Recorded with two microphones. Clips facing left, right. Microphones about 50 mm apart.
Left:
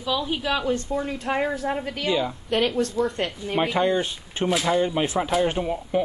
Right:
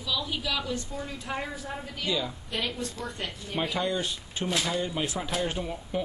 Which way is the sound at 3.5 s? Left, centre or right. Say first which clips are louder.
Left 7 dB; left.